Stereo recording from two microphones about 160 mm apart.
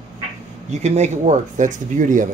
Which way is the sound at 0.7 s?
45° right (ahead or behind).